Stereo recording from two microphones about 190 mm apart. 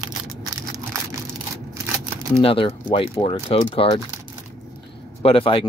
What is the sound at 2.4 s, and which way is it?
Speech, 30° left (ahead or behind).